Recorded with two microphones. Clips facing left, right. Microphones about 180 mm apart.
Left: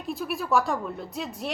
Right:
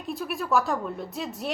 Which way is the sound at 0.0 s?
Centre (ahead or behind).